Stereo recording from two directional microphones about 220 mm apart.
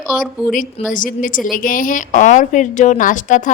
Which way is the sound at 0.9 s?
35° left (ahead or behind).